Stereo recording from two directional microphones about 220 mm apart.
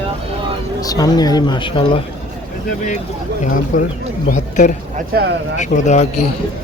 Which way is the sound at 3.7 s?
35° left (ahead or behind).